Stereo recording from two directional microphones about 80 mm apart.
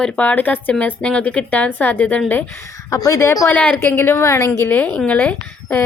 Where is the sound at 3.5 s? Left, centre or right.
Centre.